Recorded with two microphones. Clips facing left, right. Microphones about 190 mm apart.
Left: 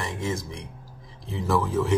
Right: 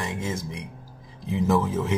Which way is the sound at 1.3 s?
20° right (ahead or behind).